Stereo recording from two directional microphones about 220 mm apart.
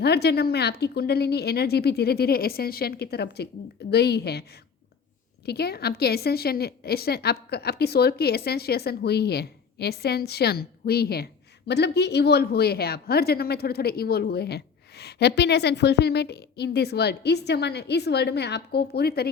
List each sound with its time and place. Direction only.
0.0 s a woman's voice: 50° left (ahead or behind)
5.5 s a woman's voice: 45° left (ahead or behind)